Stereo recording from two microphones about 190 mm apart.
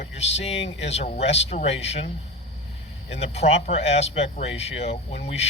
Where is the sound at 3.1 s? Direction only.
35° left (ahead or behind).